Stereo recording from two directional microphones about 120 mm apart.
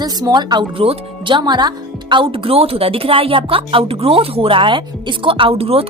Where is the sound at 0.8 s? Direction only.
45° right (ahead or behind).